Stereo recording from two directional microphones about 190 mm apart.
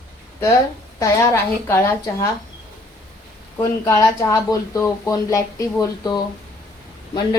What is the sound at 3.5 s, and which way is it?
Speech, 15° left (ahead or behind).